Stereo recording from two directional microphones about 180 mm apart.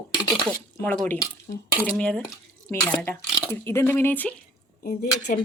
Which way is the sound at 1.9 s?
5° left (ahead or behind).